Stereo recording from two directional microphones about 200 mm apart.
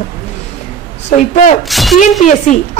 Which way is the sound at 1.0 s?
35° left (ahead or behind).